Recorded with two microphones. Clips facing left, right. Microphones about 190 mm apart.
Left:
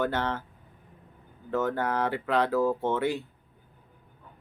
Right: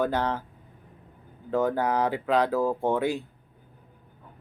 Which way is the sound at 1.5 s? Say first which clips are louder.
Right 3 dB; 15° right (ahead or behind).